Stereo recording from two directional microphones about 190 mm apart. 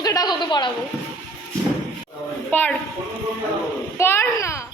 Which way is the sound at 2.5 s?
10° left (ahead or behind).